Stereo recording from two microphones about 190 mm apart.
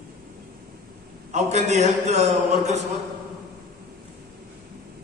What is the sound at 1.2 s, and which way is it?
A man's voice, 35° right (ahead or behind).